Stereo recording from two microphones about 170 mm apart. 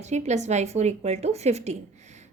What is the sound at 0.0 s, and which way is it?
A woman's voice, 40° right (ahead or behind).